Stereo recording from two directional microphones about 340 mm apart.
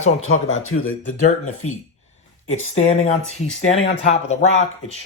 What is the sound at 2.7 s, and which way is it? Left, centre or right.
Speech, centre.